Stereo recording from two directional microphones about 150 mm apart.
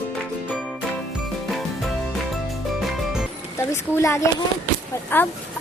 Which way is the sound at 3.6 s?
20° left (ahead or behind).